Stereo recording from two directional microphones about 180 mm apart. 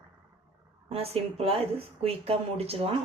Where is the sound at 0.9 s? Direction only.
35° right (ahead or behind).